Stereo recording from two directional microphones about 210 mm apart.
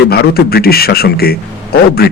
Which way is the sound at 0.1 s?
50° left (ahead or behind).